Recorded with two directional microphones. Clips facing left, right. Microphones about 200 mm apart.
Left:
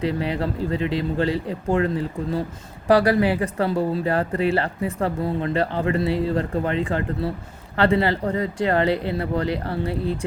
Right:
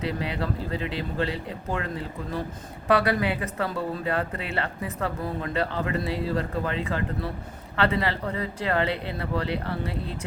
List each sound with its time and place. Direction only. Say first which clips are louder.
0.0 s speech: left 5 dB; 30° left (ahead or behind)